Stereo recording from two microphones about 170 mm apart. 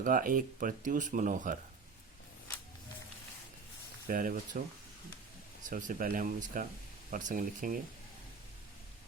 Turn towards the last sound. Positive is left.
turn(degrees=-55)  # may be behind; listen again after turning